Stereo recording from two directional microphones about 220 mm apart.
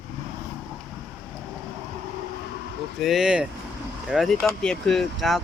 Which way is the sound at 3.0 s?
Centre (ahead or behind).